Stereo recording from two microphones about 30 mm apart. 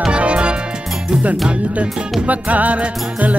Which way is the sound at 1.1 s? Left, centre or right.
Right.